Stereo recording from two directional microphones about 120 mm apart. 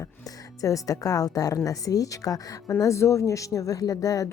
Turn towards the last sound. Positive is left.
turn(degrees=30)  # may be behind; listen again after turning